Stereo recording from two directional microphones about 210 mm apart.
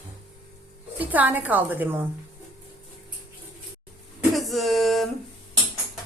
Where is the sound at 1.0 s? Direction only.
10° right (ahead or behind).